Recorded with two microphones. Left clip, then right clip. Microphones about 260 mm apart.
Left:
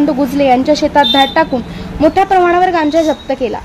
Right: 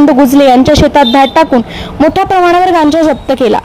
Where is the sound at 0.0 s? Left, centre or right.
Right.